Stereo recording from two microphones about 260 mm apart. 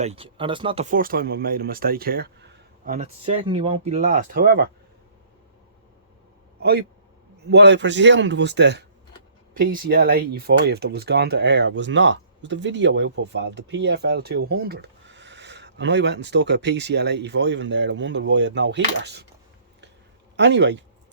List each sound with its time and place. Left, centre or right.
0.0 s speech: right
6.6 s a man's voice: right
20.3 s a man's voice: right